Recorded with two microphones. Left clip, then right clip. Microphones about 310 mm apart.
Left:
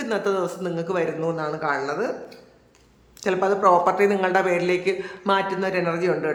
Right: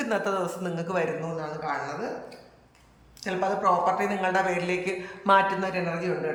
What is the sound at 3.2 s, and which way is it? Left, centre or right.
Speech, centre.